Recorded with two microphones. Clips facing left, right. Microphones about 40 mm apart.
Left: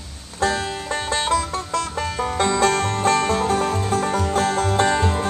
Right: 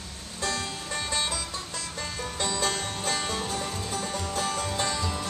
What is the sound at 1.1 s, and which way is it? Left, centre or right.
Music, left.